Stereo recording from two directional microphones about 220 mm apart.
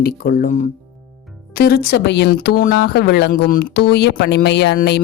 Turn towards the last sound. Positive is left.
turn(degrees=50)  # may be behind; listen again after turning